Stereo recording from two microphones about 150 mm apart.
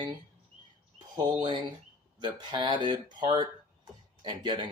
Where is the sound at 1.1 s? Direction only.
30° right (ahead or behind).